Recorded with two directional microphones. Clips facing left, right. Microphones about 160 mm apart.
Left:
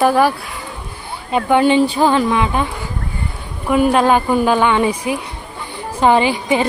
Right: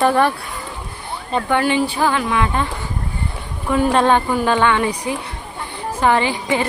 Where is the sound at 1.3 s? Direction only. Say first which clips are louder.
Left 5 dB; 15° left (ahead or behind).